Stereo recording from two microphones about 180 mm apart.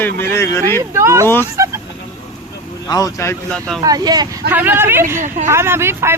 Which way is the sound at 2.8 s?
20° left (ahead or behind).